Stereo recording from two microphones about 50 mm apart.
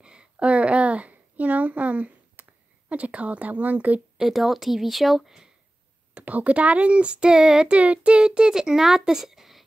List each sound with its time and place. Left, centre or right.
0.0 s a sound: centre
2.9 s speech: right
4.3 s speech: centre
6.1 s speech: right; by 9.7 s centre